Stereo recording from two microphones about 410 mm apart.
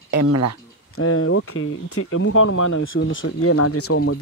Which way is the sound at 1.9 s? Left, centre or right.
Left.